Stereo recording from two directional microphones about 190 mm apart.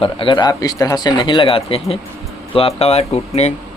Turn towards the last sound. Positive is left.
turn(degrees=35)  # may be behind; listen again after turning